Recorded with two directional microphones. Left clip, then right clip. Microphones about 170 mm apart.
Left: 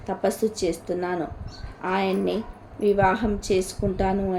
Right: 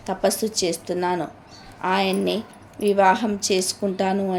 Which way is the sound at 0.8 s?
25° right (ahead or behind).